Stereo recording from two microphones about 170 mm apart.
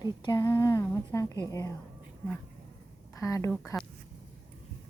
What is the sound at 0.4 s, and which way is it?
A woman's voice, 15° left (ahead or behind).